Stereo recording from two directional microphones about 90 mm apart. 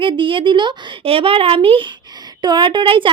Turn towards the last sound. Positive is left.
turn(degrees=-70)  # may be behind; listen again after turning